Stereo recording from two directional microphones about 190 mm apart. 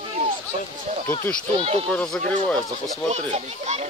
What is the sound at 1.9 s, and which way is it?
Speech, 5° left (ahead or behind).